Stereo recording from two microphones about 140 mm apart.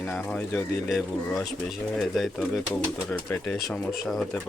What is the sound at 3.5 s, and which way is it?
Speech, 5° left (ahead or behind).